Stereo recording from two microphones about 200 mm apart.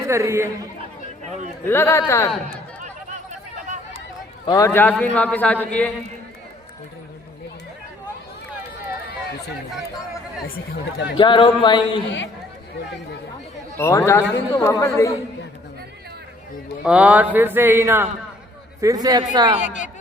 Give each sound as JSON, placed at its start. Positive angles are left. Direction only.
{"t": 0.0, "sound": "a sound", "side_deg": -15}
{"t": 1.6, "sound": "a man's voice", "side_deg": 10}
{"t": 4.4, "sound": "a man's voice", "side_deg": 15}
{"t": 11.2, "sound": "speech", "side_deg": 25}
{"t": 13.7, "sound": "a man's voice", "side_deg": 15}
{"t": 16.8, "sound": "a sound", "side_deg": -5}
{"t": 18.8, "sound": "speech", "side_deg": -15}
{"t": 19.6, "sound": "speech", "side_deg": 40}